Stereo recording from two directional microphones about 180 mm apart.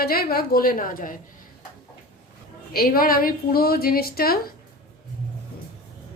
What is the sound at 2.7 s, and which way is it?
A woman's voice, 55° left (ahead or behind).